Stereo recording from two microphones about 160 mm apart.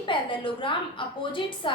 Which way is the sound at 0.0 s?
30° left (ahead or behind).